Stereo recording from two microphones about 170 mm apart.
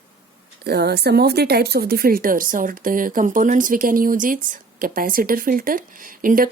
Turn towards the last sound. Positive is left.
turn(degrees=-55)  # may be behind; listen again after turning